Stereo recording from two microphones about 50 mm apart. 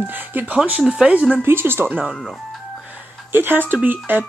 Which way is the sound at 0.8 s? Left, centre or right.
Centre.